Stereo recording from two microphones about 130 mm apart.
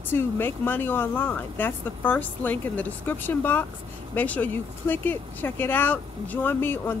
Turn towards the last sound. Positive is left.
turn(degrees=15)  # may be behind; listen again after turning